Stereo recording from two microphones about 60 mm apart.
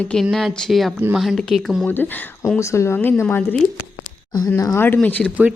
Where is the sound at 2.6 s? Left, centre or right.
Left.